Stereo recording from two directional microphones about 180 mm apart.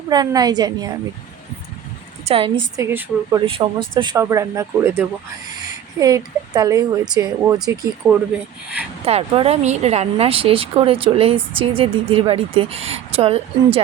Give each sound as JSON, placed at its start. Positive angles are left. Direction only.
{"t": 0.1, "sound": "speech", "side_deg": -20}
{"t": 2.2, "sound": "a woman's voice", "side_deg": -30}
{"t": 2.7, "sound": "speech", "side_deg": -15}
{"t": 3.4, "sound": "speech", "side_deg": -30}
{"t": 9.0, "sound": "speech", "side_deg": -35}